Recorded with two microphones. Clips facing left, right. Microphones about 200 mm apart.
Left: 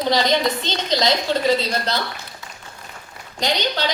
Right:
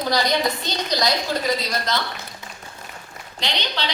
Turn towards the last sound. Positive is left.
turn(degrees=45)  # may be behind; listen again after turning